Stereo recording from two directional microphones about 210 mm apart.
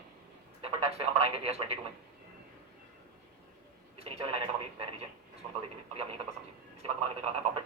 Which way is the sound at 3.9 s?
30° right (ahead or behind).